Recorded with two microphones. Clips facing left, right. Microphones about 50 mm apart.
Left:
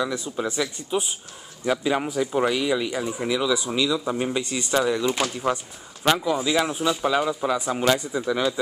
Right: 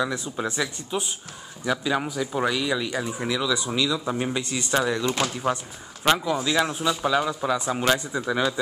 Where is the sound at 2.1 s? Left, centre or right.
Left; by 5.2 s centre.